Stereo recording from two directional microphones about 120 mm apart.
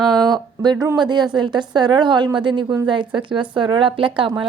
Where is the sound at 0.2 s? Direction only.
35° right (ahead or behind).